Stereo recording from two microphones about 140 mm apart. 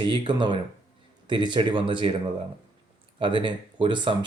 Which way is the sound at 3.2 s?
35° right (ahead or behind).